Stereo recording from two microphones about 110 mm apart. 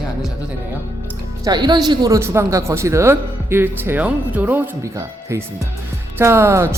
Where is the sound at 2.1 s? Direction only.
25° right (ahead or behind).